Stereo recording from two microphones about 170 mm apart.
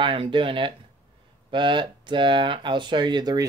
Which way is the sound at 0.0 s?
30° right (ahead or behind).